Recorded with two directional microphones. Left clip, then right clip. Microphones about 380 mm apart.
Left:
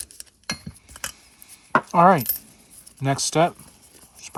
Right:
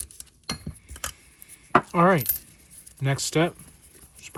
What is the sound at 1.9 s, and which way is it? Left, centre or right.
Speech, centre.